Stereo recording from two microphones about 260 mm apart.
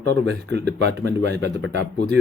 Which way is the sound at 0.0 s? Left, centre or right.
Right.